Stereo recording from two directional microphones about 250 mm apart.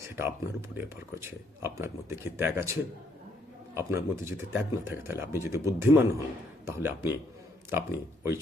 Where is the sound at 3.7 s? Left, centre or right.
Centre.